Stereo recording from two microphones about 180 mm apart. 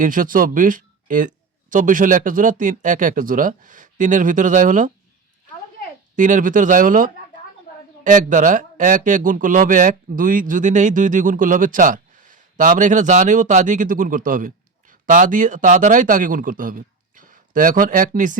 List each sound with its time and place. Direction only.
0.0 s speech: 50° right (ahead or behind)
6.1 s speech: 45° right (ahead or behind)